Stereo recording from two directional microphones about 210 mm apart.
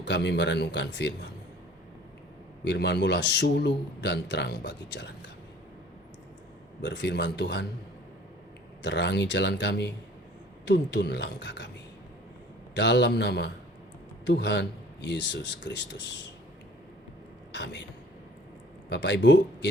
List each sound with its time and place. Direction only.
0.0 s speech: 55° left (ahead or behind)
2.6 s a man's voice: 55° left (ahead or behind)
6.8 s speech: 55° left (ahead or behind)
8.8 s a man's voice: 55° left (ahead or behind)
12.7 s a man's voice: 55° left (ahead or behind)
17.5 s speech: 55° left (ahead or behind)
18.9 s speech: 55° left (ahead or behind)